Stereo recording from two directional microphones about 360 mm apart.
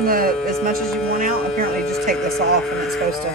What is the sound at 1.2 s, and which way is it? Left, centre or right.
Speech, right.